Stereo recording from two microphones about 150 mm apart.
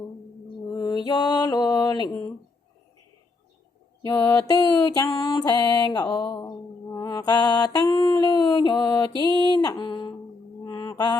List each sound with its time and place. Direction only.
0.8 s mantra: 25° left (ahead or behind)
4.1 s mantra: 15° left (ahead or behind)
9.6 s a sound: 30° left (ahead or behind)
10.7 s mantra: 25° left (ahead or behind)